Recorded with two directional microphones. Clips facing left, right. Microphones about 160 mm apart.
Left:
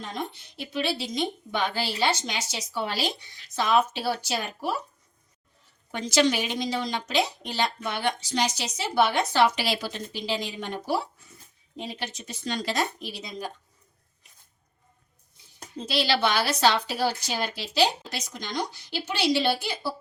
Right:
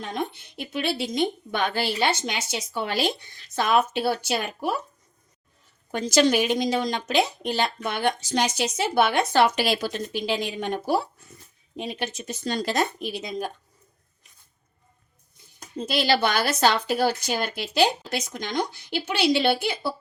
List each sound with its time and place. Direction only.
0.0 s speech: 60° right (ahead or behind)
5.9 s speech: 45° right (ahead or behind)
15.9 s speech: 50° right (ahead or behind)